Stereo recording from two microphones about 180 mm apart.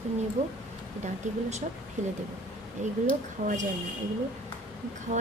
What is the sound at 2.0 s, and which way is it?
Speech, 45° right (ahead or behind).